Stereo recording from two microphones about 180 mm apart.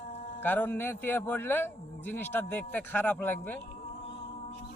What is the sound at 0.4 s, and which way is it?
Speech, 10° left (ahead or behind).